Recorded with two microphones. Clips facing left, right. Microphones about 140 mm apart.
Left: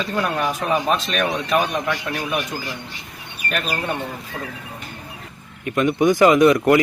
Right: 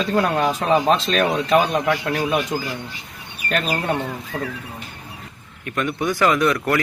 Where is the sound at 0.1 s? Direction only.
35° right (ahead or behind).